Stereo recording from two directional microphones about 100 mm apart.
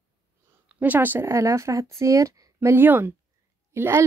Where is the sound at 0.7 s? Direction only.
20° right (ahead or behind).